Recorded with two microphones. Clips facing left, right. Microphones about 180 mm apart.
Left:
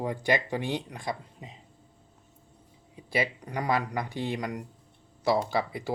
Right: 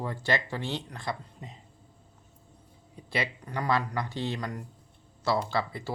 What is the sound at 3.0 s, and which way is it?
Speech, 10° left (ahead or behind).